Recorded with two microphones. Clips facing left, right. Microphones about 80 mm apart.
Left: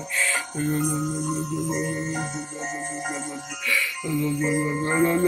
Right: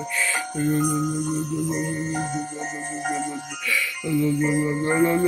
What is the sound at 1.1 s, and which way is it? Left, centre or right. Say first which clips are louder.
Music: right 2 dB; left.